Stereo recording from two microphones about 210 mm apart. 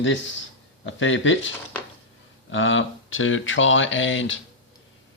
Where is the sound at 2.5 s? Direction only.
65° left (ahead or behind).